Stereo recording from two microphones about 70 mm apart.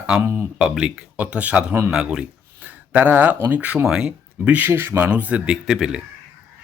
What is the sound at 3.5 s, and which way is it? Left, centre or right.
Speech, right.